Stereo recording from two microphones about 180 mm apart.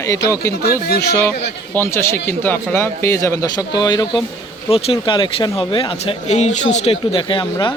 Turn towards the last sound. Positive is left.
turn(degrees=25)  # may be behind; listen again after turning